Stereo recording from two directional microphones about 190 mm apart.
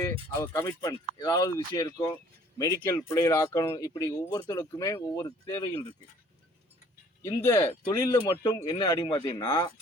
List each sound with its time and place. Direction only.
0.0 s speech: 15° left (ahead or behind)
7.2 s speech: 15° left (ahead or behind)